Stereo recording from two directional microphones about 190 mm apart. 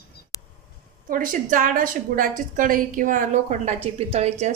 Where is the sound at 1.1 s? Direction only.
45° right (ahead or behind).